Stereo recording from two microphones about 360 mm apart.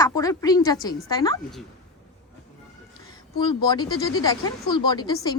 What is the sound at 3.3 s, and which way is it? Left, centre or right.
Speech, centre.